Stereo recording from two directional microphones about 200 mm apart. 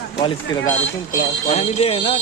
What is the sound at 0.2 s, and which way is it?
Speech, 25° left (ahead or behind).